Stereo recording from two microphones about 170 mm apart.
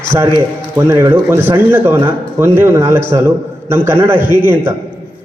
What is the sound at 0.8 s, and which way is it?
A man's voice, 15° right (ahead or behind).